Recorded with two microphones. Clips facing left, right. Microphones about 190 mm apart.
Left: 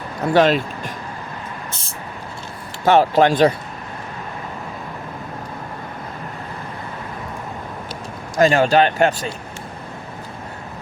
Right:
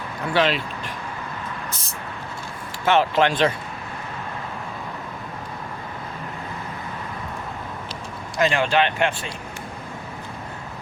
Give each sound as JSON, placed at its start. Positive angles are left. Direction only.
{"t": 0.2, "sound": "speech", "side_deg": 45}
{"t": 2.8, "sound": "speech", "side_deg": 40}
{"t": 8.4, "sound": "speech", "side_deg": 40}